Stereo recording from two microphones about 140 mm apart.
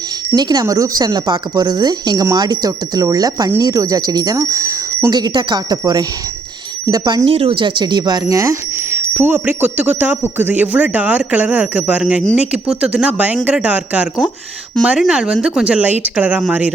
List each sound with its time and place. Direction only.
0.3 s speech: 30° right (ahead or behind)
5.1 s speech: 30° right (ahead or behind)
7.3 s speech: 40° right (ahead or behind); by 16.7 s 10° right (ahead or behind)